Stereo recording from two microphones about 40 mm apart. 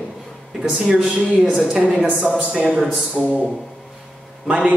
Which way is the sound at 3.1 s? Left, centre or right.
Right.